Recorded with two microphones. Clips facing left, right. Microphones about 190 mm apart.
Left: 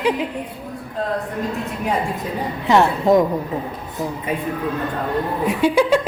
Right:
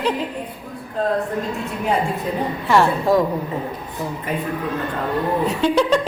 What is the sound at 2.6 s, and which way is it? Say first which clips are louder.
Speech: left 2 dB; 20° left (ahead or behind).